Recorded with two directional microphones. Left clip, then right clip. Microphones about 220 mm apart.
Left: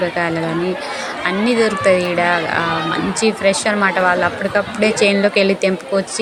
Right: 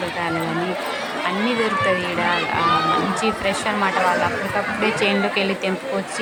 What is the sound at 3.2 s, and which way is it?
Speech, 20° left (ahead or behind).